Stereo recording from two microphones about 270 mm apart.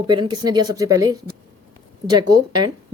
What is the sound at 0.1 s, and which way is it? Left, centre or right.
A woman's voice, centre.